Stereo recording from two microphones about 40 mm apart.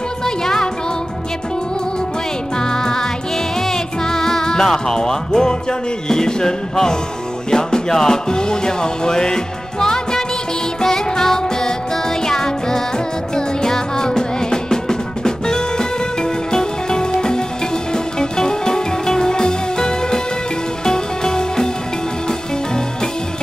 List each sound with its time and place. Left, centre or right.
0.2 s music: centre
2.5 s music: centre